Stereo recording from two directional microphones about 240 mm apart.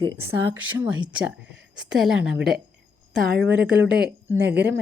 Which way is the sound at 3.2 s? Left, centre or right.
Right.